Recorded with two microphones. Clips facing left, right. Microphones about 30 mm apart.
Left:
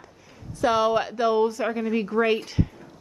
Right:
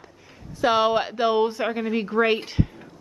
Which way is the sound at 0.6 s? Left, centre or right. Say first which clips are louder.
Right 1 dB; right.